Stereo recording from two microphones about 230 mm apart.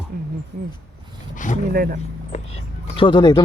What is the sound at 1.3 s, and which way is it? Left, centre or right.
Speech, left.